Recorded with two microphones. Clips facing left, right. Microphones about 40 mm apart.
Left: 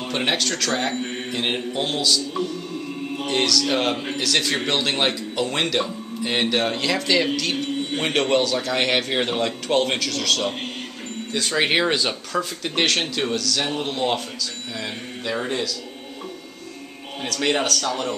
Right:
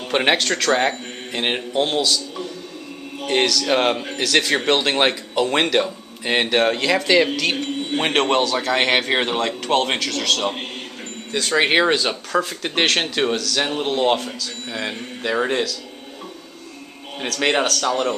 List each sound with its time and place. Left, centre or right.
0.1 s a man's voice: right; by 2.1 s centre
3.3 s a man's voice: centre
8.0 s a man's voice: right
9.2 s speech: centre
13.7 s a man's voice: centre
17.2 s a man's voice: right